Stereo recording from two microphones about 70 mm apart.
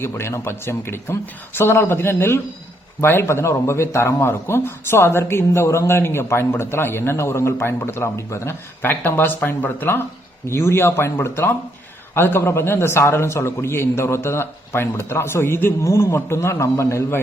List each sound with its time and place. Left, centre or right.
0.0 s speech: left
8.8 s speech: left